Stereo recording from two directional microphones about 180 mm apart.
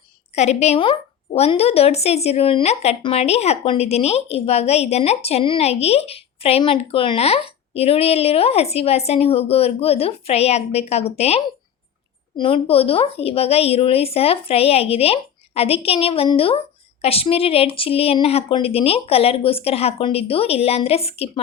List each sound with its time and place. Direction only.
0.3 s a woman's voice: 35° left (ahead or behind)